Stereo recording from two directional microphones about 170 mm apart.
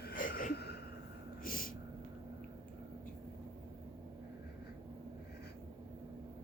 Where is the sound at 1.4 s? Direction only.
55° left (ahead or behind).